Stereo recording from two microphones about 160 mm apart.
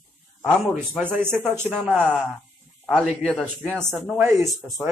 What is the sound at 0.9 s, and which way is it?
Speech, 10° right (ahead or behind).